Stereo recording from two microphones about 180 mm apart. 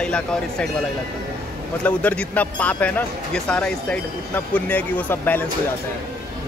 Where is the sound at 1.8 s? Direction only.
10° left (ahead or behind).